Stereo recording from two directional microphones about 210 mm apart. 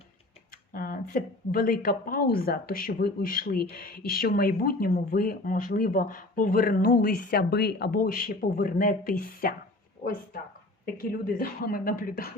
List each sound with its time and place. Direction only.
0.7 s speech: 40° left (ahead or behind)